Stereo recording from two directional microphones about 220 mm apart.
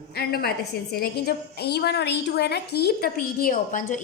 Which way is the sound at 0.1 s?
45° left (ahead or behind).